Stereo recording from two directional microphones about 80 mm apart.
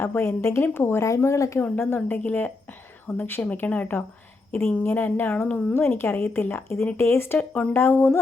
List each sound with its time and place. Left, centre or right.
0.0 s speech: left
1.6 s speech: left
7.3 s speech: centre
7.7 s speech: left